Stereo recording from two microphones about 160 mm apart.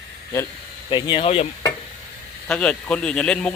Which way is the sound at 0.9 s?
30° left (ahead or behind).